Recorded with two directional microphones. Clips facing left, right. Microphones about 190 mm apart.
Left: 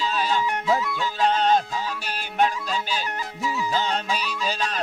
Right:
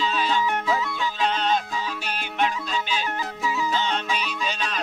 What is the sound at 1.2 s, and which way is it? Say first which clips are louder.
Music: left 4 dB; 45° left (ahead or behind).